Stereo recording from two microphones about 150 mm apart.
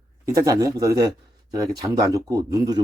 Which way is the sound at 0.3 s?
25° right (ahead or behind).